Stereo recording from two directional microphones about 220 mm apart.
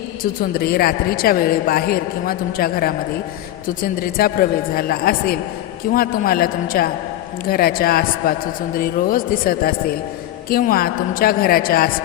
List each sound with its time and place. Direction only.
0.2 s a man's voice: 45° left (ahead or behind)